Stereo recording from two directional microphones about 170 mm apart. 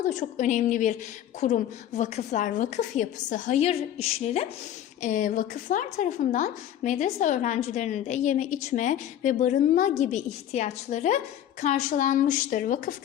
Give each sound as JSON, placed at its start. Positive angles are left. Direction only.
{"t": 0.1, "sound": "a woman's voice", "side_deg": 50}
{"t": 5.0, "sound": "a woman's voice", "side_deg": 50}